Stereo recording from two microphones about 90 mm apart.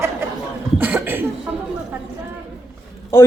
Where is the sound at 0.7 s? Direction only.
20° right (ahead or behind).